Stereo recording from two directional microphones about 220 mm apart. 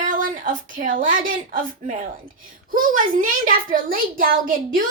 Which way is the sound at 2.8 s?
40° right (ahead or behind).